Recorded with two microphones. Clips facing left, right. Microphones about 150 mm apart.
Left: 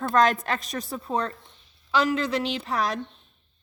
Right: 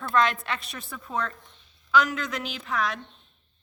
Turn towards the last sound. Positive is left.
turn(degrees=35)  # may be behind; listen again after turning